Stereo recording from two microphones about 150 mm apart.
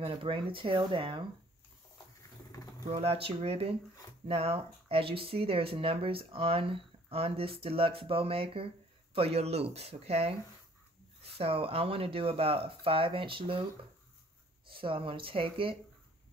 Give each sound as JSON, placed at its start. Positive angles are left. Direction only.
{"t": 0.0, "sound": "speech", "side_deg": -35}
{"t": 2.9, "sound": "speech", "side_deg": -40}
{"t": 11.3, "sound": "speech", "side_deg": -40}
{"t": 14.7, "sound": "speech", "side_deg": -35}